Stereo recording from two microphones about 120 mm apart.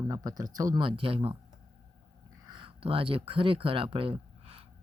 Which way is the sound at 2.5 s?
45° right (ahead or behind).